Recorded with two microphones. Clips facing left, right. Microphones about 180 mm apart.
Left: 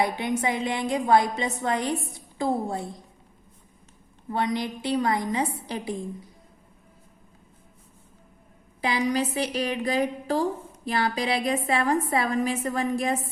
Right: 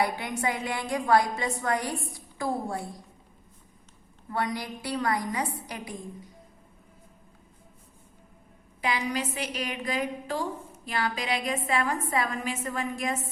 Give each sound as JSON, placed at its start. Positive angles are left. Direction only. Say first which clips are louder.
{"t": 0.0, "sound": "a woman's voice", "louder": "left 3 dB", "side_deg": 20}
{"t": 4.3, "sound": "a woman's voice", "louder": "left 4 dB", "side_deg": 20}
{"t": 8.8, "sound": "a woman's voice", "louder": "left 5 dB", "side_deg": 35}